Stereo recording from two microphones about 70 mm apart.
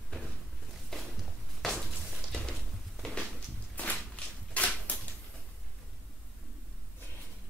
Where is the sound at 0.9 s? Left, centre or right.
Centre.